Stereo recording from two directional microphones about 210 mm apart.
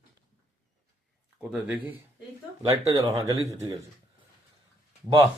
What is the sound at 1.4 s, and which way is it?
Speech, 5° right (ahead or behind).